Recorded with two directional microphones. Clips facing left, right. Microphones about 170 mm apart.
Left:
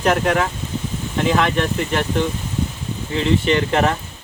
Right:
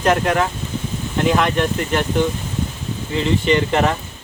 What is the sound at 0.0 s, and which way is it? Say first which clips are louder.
Speech: right 1 dB; 5° left (ahead or behind).